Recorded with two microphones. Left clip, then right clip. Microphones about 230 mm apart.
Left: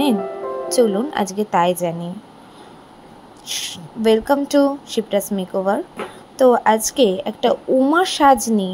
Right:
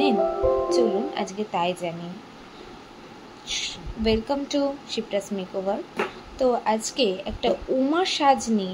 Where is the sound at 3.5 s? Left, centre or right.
Left.